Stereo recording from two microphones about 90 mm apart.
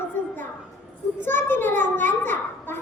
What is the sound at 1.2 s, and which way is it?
Children playing, 25° left (ahead or behind).